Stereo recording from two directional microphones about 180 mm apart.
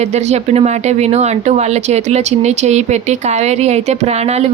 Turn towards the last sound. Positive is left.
turn(degrees=-35)  # may be behind; listen again after turning